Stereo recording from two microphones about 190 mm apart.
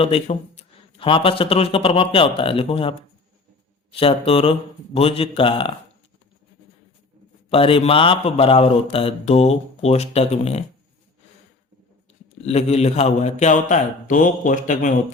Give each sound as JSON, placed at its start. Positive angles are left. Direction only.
{"t": 0.0, "sound": "a man's voice", "side_deg": 35}
{"t": 3.9, "sound": "a man's voice", "side_deg": 30}
{"t": 7.5, "sound": "a man's voice", "side_deg": 30}
{"t": 12.5, "sound": "a man's voice", "side_deg": 35}